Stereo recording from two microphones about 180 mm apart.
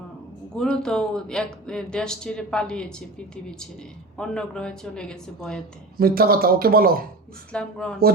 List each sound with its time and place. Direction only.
0.5 s speech: 5° left (ahead or behind)
4.2 s speech: 5° left (ahead or behind)
6.0 s speech: 55° right (ahead or behind)
7.5 s speech: 5° left (ahead or behind)